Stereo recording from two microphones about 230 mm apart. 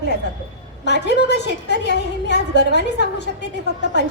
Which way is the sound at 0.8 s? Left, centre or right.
Left.